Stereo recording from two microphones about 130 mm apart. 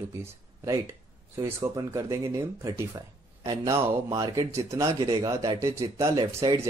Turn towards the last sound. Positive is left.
turn(degrees=-25)  # may be behind; listen again after turning